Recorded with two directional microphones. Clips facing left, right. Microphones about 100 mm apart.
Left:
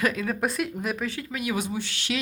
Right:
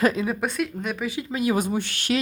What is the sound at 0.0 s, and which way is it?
Speech, 25° right (ahead or behind).